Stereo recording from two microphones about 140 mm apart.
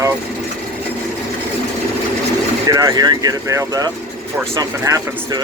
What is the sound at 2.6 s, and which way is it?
Speech, 25° right (ahead or behind).